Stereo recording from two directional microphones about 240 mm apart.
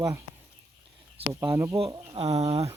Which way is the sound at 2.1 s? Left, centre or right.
Right.